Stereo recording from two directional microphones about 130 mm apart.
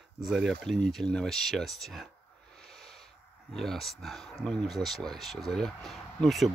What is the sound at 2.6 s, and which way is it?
Owl, 5° left (ahead or behind).